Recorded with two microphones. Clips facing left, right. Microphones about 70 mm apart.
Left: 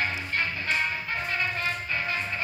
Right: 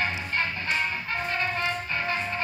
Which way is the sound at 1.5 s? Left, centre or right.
Right.